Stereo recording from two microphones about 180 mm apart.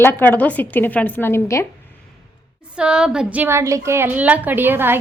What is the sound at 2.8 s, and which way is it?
A woman's voice, 5° right (ahead or behind).